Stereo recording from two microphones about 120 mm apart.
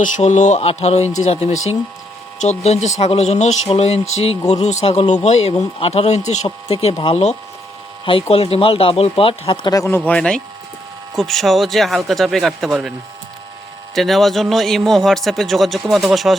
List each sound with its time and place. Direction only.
0.0 s speech: 80° left; by 9.7 s 45° left (ahead or behind)
9.7 s speech: 20° left (ahead or behind)
10.1 s a man's voice: 5° left (ahead or behind)
13.9 s a man's voice: centre (ahead or behind)